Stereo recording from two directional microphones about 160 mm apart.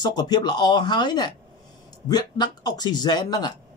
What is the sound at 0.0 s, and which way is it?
Speech, 25° left (ahead or behind).